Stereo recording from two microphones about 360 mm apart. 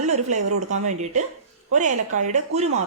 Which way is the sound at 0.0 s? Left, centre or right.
Centre.